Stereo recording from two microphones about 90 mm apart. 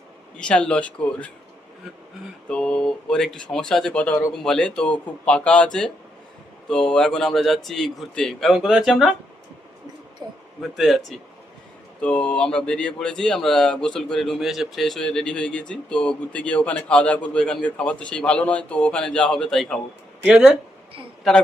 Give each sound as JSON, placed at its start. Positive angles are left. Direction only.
{"t": 0.3, "sound": "speech", "side_deg": 10}
{"t": 2.5, "sound": "a man's voice", "side_deg": 10}
{"t": 10.2, "sound": "speech", "side_deg": -45}
{"t": 10.6, "sound": "a man's voice", "side_deg": 0}
{"t": 21.3, "sound": "a man's voice", "side_deg": 5}